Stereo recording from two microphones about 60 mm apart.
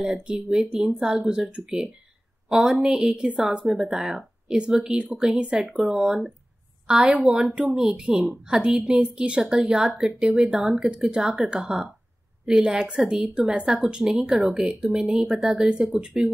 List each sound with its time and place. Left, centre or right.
0.0 s speech: centre